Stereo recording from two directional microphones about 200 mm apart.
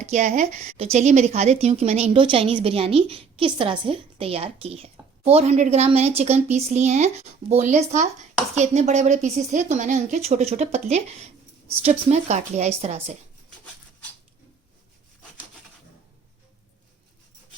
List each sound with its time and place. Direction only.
0.0 s a woman's voice: 35° right (ahead or behind)
12.3 s a woman's voice: 35° right (ahead or behind)